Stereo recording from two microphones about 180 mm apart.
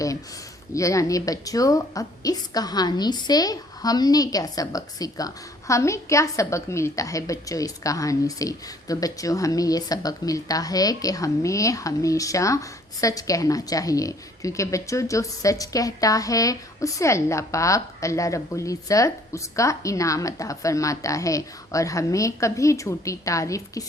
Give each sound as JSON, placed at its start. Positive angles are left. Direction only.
{"t": 0.7, "sound": "a woman's voice", "side_deg": 15}